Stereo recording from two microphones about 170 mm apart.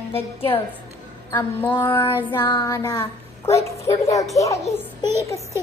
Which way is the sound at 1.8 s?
30° left (ahead or behind).